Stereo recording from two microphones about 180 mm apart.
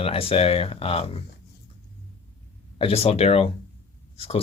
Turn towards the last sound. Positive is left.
turn(degrees=30)  # may be behind; listen again after turning